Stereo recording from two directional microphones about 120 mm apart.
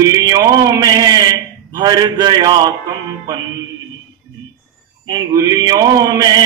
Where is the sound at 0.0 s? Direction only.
30° right (ahead or behind).